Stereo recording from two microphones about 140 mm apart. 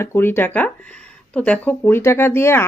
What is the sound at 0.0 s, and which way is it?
Speech, 15° left (ahead or behind).